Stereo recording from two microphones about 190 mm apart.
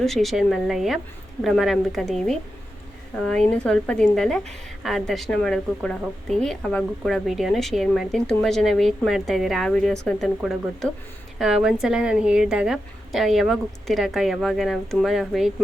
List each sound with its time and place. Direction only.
0.0 s a woman's voice: centre (ahead or behind)